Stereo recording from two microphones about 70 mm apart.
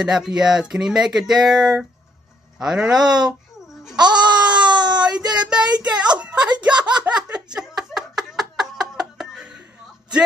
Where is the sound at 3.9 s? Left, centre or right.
Right.